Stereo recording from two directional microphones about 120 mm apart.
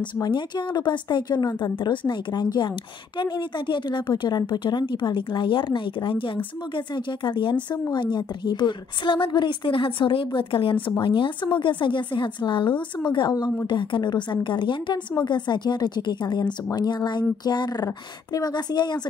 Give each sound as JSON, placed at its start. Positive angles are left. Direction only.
{"t": 0.2, "sound": "a woman's voice", "side_deg": 40}